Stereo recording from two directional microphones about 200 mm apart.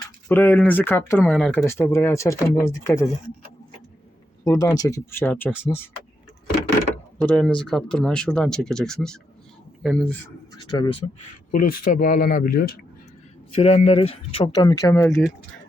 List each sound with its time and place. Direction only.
0.3 s speech: 10° left (ahead or behind)
4.4 s speech: 15° left (ahead or behind)
7.2 s speech: 5° left (ahead or behind)
10.6 s speech: 20° left (ahead or behind)
11.5 s speech: 45° left (ahead or behind)
13.6 s speech: 30° left (ahead or behind); by 15.2 s 15° left (ahead or behind)